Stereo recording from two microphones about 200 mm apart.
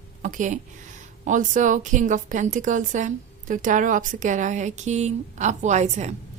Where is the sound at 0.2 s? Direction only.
40° right (ahead or behind).